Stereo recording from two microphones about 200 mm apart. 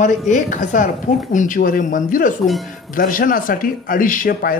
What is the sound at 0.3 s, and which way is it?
Speech, 40° left (ahead or behind).